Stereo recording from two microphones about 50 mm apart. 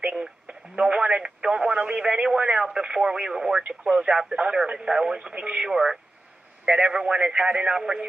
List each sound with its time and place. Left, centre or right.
0.1 s speech: centre